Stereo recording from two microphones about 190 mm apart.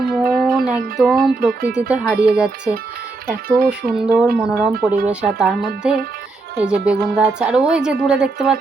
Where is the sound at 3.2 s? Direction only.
50° right (ahead or behind).